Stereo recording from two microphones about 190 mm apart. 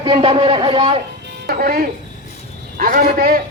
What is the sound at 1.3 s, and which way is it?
A man's voice, 55° right (ahead or behind).